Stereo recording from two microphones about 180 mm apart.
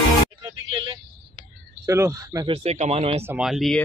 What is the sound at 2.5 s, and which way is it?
Speech, 35° right (ahead or behind).